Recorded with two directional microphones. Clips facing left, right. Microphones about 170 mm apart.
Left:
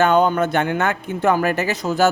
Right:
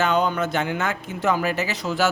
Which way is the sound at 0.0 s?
50° left (ahead or behind).